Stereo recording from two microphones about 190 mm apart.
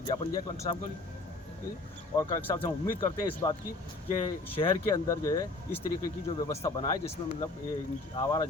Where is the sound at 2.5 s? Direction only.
25° left (ahead or behind).